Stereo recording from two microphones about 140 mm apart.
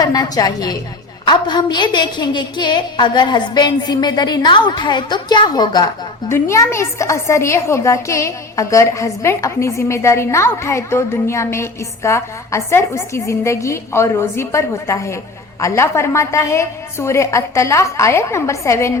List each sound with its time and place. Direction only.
0.0 s a woman's voice: 25° left (ahead or behind)
6.3 s a woman's voice: 20° left (ahead or behind)